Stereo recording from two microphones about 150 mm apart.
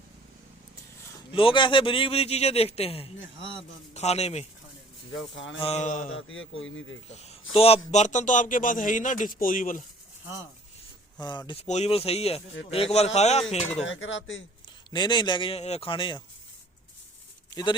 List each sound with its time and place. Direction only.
1.3 s a man's voice: 35° left (ahead or behind)
5.5 s a man's voice: 45° left (ahead or behind)
7.1 s a man's voice: 45° left (ahead or behind); by 9.8 s 65° left (ahead or behind)
11.2 s a man's voice: 30° left (ahead or behind)
11.6 s a man's voice: 45° left (ahead or behind)
14.8 s a man's voice: 30° left (ahead or behind)
17.5 s speech: 30° left (ahead or behind)